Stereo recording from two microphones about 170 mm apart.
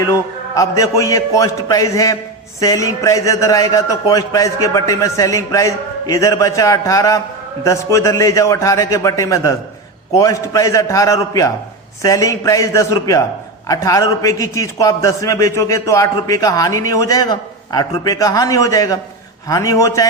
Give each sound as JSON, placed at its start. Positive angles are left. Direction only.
{"t": 0.0, "sound": "a man's voice", "side_deg": 20}